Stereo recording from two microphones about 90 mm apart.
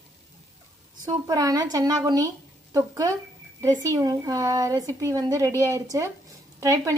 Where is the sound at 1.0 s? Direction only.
50° right (ahead or behind).